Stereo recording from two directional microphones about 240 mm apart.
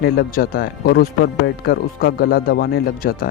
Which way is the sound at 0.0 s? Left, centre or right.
Left.